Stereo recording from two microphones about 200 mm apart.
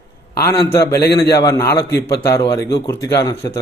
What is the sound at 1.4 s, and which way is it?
Speech, 15° left (ahead or behind).